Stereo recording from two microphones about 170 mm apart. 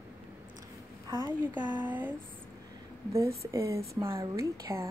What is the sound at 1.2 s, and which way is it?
Speech, 10° right (ahead or behind).